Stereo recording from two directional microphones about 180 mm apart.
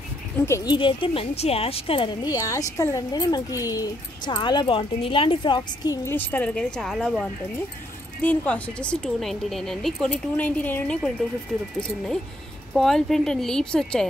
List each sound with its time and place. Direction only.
0.5 s speech: 25° left (ahead or behind)
2.2 s speech: 20° left (ahead or behind)
6.0 s speech: 10° left (ahead or behind)
12.7 s speech: centre (ahead or behind)